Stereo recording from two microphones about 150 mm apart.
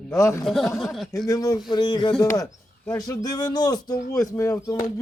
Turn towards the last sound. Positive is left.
turn(degrees=20)  # may be behind; listen again after turning